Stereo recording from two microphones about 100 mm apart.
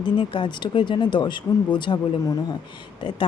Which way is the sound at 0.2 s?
50° left (ahead or behind).